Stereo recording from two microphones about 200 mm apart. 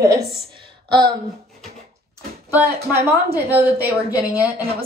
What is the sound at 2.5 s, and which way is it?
Speech, 10° right (ahead or behind).